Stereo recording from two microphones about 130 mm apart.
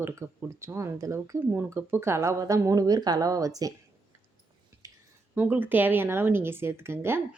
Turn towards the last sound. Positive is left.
turn(degrees=-20)  # may be behind; listen again after turning